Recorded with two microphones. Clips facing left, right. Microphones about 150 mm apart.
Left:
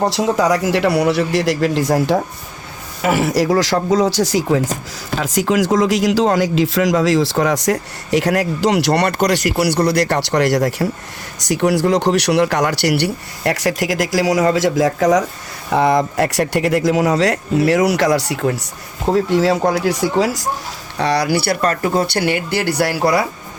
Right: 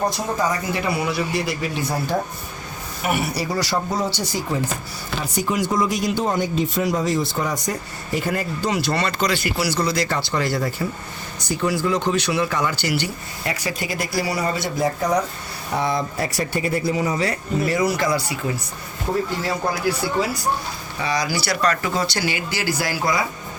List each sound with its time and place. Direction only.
0.1 s speech: 85° left
21.0 s speech: 70° left (ahead or behind)